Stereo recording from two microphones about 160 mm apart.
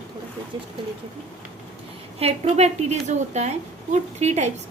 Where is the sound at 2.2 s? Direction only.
40° right (ahead or behind).